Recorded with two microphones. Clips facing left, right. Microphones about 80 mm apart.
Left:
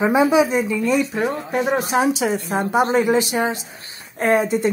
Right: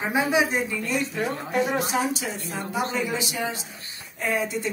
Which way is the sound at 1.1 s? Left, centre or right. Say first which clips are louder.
Left 4 dB; left.